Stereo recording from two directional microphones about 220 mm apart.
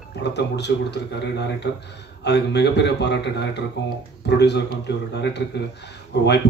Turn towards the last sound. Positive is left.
turn(degrees=50)  # may be behind; listen again after turning